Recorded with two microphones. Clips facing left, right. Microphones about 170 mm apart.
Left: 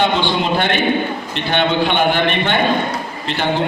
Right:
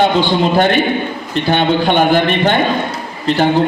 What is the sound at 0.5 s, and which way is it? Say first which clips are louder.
A man's voice: right 4 dB; 40° right (ahead or behind).